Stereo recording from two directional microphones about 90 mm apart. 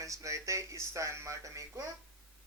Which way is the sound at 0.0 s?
35° right (ahead or behind).